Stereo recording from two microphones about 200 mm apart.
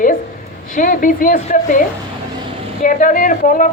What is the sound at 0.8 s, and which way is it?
A woman's voice, 45° left (ahead or behind).